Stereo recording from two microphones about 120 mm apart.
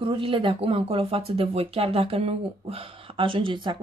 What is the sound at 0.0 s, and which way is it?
Speech, 45° right (ahead or behind).